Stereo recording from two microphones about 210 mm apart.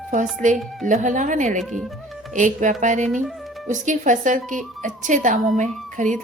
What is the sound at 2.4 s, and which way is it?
A woman's voice, 35° right (ahead or behind).